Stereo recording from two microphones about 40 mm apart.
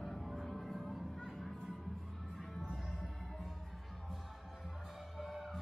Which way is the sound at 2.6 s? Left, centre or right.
Centre.